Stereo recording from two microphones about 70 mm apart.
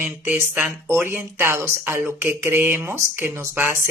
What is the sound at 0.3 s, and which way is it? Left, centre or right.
Speech, right.